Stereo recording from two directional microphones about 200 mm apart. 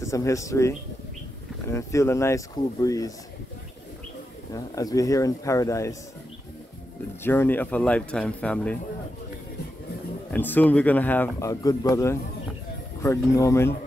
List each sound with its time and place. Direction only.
0.0 s speech: 15° left (ahead or behind)
4.5 s speech: 15° left (ahead or behind)
7.2 s speech: 10° left (ahead or behind)
10.3 s speech: 10° left (ahead or behind)